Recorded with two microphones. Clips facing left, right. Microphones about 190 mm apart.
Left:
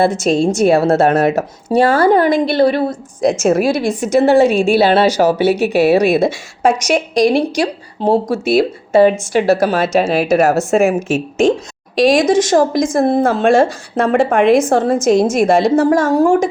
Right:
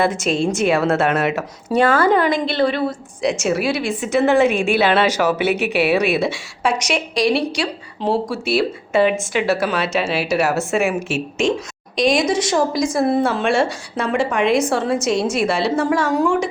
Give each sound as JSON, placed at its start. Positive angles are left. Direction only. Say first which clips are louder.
{"t": 0.0, "sound": "a woman's voice", "louder": "left 5 dB", "side_deg": 40}
{"t": 12.1, "sound": "a woman's voice", "louder": "left 6 dB", "side_deg": 50}